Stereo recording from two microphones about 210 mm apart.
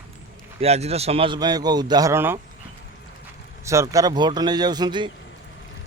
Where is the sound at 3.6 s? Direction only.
15° right (ahead or behind).